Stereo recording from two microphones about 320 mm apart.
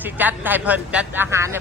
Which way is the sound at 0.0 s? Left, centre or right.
Centre.